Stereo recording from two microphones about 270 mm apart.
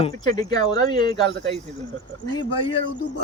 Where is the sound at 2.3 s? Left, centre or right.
Centre.